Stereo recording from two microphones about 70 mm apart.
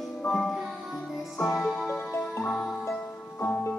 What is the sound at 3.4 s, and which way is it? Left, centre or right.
Music, left.